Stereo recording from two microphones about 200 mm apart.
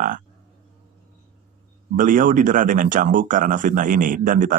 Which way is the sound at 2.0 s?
40° right (ahead or behind).